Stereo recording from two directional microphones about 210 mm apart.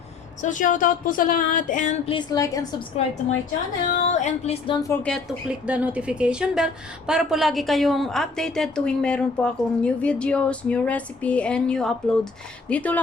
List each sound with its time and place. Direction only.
0.4 s speech: 40° left (ahead or behind)
2.1 s a woman's voice: 15° left (ahead or behind)
3.8 s speech: 40° left (ahead or behind)
4.9 s a woman's voice: 5° left (ahead or behind)